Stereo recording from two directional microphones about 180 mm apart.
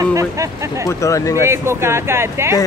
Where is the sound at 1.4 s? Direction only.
15° right (ahead or behind).